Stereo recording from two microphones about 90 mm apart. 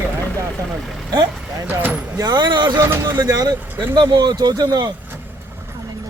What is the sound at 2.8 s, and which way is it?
Speech, 30° right (ahead or behind).